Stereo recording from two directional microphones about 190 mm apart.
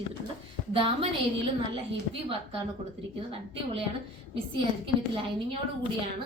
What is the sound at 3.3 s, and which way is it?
Speech, 30° right (ahead or behind).